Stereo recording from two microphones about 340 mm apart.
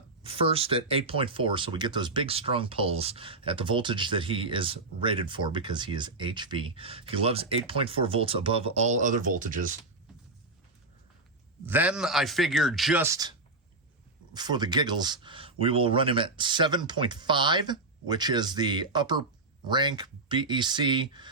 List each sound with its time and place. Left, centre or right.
0.2 s speech: centre
11.6 s speech: centre
14.3 s speech: centre